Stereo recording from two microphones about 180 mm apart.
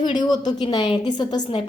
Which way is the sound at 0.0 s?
25° left (ahead or behind).